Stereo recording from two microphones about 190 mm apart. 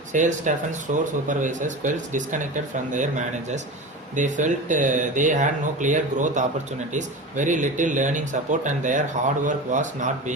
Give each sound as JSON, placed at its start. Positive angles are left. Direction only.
{"t": 0.1, "sound": "speech", "side_deg": -40}